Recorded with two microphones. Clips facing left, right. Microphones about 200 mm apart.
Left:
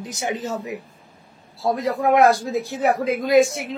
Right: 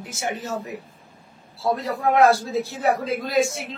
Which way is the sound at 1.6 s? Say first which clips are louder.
Left 2 dB; 20° left (ahead or behind).